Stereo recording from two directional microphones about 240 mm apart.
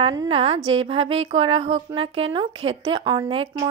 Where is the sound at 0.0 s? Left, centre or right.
Centre.